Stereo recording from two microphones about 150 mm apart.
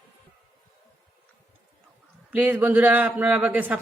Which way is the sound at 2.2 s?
10° right (ahead or behind).